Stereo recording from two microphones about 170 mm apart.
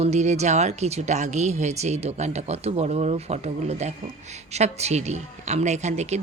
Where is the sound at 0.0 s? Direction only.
40° right (ahead or behind).